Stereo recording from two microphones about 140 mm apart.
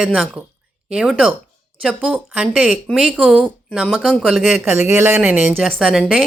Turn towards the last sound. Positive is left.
turn(degrees=0)  # may be behind; listen again after turning